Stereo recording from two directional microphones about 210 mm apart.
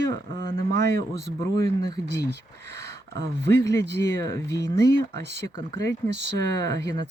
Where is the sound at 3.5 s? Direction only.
10° left (ahead or behind).